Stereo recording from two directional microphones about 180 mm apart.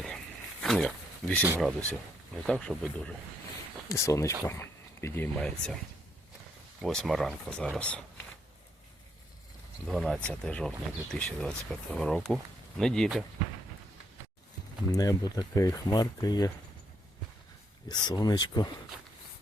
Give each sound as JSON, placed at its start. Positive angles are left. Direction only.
{"t": 0.6, "sound": "a sound", "side_deg": 0}
{"t": 1.4, "sound": "speech", "side_deg": -10}
{"t": 2.5, "sound": "speech", "side_deg": 5}
{"t": 3.8, "sound": "speech", "side_deg": 15}
{"t": 6.8, "sound": "speech", "side_deg": 0}
{"t": 9.8, "sound": "speech", "side_deg": 0}
{"t": 14.9, "sound": "speech", "side_deg": 20}
{"t": 17.8, "sound": "speech", "side_deg": 25}